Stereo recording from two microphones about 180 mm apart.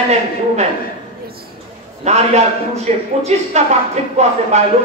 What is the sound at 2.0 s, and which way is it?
Speech, 40° right (ahead or behind).